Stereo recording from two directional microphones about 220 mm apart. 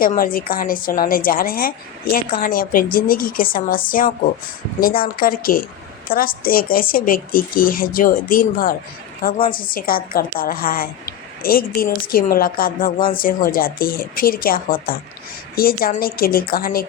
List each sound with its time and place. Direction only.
0.0 s a woman's voice: 40° left (ahead or behind)